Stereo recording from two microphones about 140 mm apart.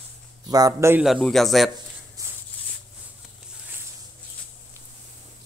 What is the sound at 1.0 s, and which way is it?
Speech, centre (ahead or behind).